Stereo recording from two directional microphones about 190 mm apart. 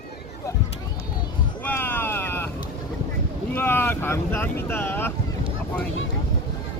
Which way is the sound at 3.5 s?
10° left (ahead or behind).